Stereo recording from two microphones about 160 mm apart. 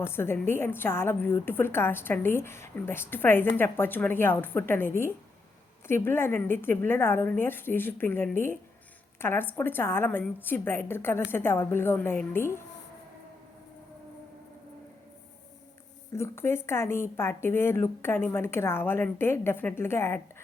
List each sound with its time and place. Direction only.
0.0 s a woman's voice: 15° left (ahead or behind)
16.1 s a woman's voice: 15° left (ahead or behind)